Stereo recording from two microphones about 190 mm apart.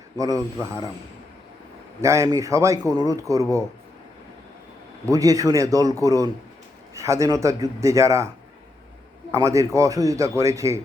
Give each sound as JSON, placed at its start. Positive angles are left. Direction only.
{"t": 0.2, "sound": "a man's voice", "side_deg": -20}
{"t": 2.0, "sound": "a man's voice", "side_deg": -15}
{"t": 5.0, "sound": "a man's voice", "side_deg": -20}
{"t": 9.3, "sound": "a man's voice", "side_deg": -15}